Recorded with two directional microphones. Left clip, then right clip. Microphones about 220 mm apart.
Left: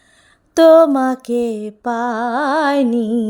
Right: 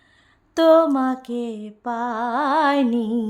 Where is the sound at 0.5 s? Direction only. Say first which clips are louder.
Left 6 dB; 25° left (ahead or behind).